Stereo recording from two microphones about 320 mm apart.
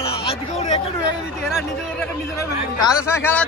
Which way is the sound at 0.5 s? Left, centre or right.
Centre.